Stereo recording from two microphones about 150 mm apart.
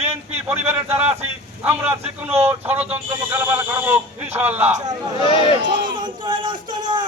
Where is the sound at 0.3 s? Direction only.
15° right (ahead or behind).